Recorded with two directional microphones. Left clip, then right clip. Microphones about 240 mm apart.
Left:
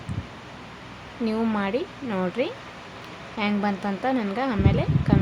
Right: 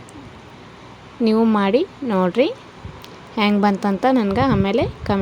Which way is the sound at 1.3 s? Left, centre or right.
Right.